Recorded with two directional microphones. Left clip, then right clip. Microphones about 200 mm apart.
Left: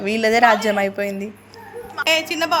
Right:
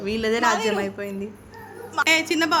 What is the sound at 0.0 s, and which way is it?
A woman's voice, 15° left (ahead or behind).